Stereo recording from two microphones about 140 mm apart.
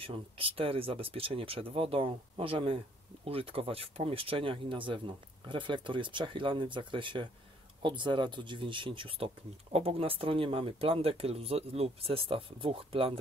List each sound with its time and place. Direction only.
0.0 s speech: 40° right (ahead or behind)